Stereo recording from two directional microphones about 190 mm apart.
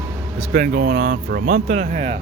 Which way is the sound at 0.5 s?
50° right (ahead or behind).